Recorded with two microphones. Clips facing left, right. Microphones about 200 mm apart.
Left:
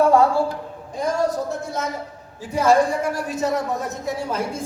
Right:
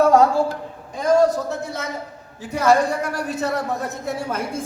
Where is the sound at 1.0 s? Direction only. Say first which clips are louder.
Right 5 dB; 65° right (ahead or behind).